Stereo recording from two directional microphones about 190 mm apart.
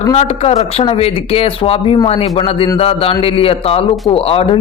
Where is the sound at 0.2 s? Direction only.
35° left (ahead or behind).